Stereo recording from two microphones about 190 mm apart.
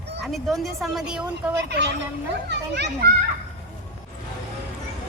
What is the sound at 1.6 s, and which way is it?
A child's voice, 60° right (ahead or behind).